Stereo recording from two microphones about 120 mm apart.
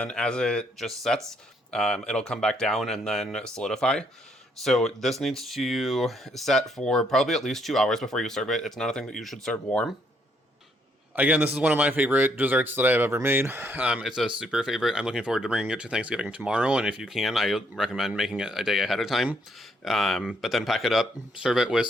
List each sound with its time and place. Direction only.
0.0 s speech: 5° left (ahead or behind)
11.1 s speech: 15° right (ahead or behind)